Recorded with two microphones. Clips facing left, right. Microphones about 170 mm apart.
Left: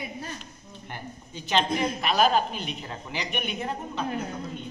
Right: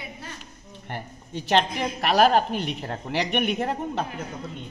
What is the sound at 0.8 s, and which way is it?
A woman's voice, 65° right (ahead or behind).